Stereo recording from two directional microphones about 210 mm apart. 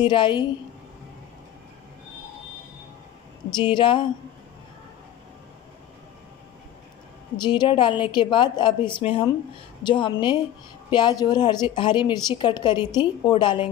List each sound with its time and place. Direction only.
0.0 s a woman's voice: 20° left (ahead or behind)
3.4 s a woman's voice: 20° left (ahead or behind)
7.3 s a woman's voice: 20° left (ahead or behind)